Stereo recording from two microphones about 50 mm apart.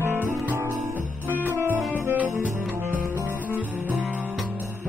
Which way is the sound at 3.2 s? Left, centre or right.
Right.